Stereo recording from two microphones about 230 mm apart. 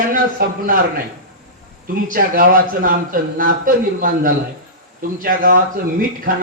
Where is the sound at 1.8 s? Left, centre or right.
Right.